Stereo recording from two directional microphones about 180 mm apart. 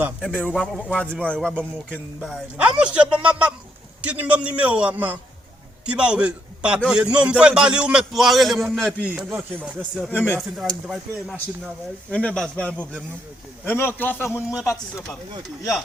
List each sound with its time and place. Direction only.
0.2 s a man's voice: 5° left (ahead or behind)
0.6 s a man's voice: 5° right (ahead or behind)
10.1 s speech: 10° left (ahead or behind)
10.4 s a man's voice: centre (ahead or behind); by 15.0 s 15° left (ahead or behind)
15.4 s a man's voice: centre (ahead or behind)